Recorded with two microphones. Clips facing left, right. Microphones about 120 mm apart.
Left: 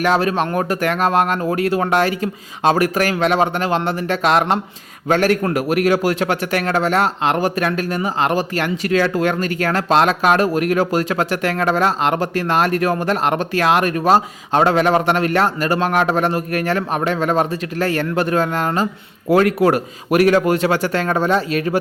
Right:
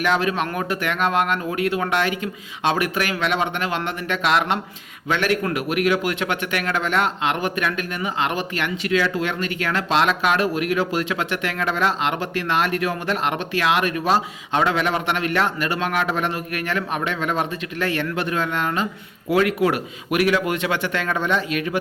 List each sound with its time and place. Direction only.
0.0 s a man's voice: 40° left (ahead or behind)